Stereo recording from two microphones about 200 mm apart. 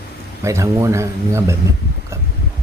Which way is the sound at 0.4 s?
15° right (ahead or behind).